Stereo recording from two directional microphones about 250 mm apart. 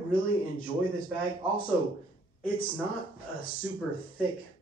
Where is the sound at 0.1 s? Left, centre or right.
Left.